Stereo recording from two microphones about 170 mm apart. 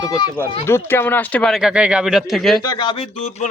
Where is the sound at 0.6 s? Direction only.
15° left (ahead or behind).